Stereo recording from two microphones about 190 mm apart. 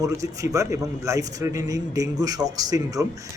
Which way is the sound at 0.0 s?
15° right (ahead or behind).